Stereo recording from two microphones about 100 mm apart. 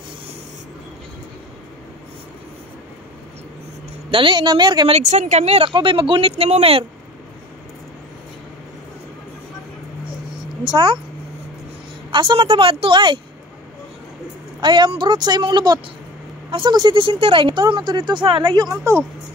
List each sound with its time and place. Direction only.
4.1 s speech: 55° right (ahead or behind)
4.8 s speech: 90° right
5.8 s speech: 60° right (ahead or behind); by 6.9 s 75° right (ahead or behind)
10.6 s speech: 50° right (ahead or behind)
12.1 s a woman's voice: 55° right (ahead or behind)
14.6 s speech: 50° right (ahead or behind)
16.4 s a woman's voice: 60° right (ahead or behind)